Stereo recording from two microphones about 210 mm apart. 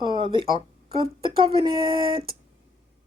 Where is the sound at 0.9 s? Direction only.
25° right (ahead or behind).